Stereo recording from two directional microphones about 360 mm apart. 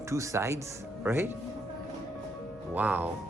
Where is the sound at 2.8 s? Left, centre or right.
Centre.